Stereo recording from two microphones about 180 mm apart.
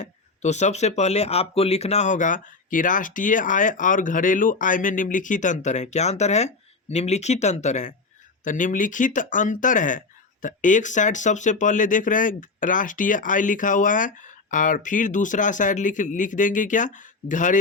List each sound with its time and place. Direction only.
0.0 s speech: 40° left (ahead or behind)